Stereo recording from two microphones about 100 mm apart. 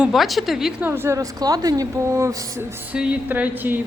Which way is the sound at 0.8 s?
20° right (ahead or behind).